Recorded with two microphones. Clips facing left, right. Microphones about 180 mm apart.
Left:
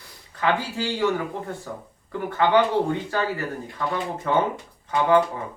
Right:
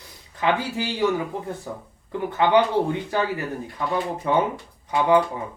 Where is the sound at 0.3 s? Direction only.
15° right (ahead or behind).